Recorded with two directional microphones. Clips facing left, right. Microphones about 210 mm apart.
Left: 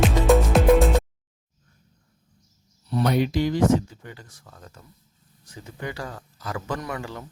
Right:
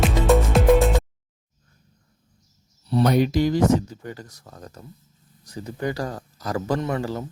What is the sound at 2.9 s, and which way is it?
Speech, 40° right (ahead or behind).